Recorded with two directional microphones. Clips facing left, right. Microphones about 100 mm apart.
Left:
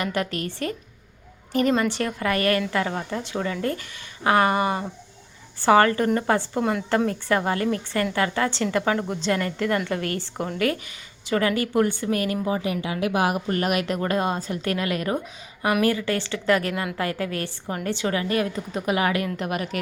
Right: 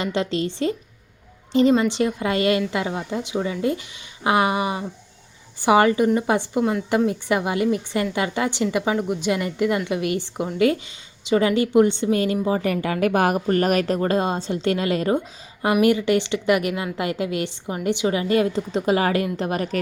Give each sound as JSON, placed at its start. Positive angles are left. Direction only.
{"t": 0.0, "sound": "a woman's voice", "side_deg": -25}
{"t": 12.6, "sound": "a woman's voice", "side_deg": -50}